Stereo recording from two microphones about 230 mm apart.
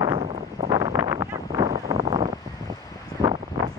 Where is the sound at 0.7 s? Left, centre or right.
Centre.